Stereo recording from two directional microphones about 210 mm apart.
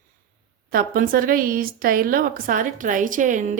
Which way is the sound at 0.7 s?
40° right (ahead or behind).